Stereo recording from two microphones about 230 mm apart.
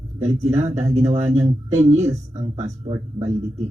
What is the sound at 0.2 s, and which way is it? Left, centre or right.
Speech, right.